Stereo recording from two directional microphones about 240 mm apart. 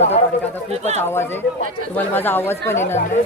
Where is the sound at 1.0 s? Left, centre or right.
Centre.